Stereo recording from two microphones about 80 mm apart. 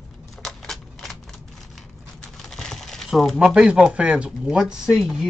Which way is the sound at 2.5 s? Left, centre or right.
Centre.